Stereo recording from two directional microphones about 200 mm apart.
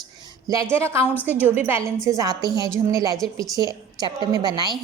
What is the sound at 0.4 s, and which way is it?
A woman's voice, 15° right (ahead or behind).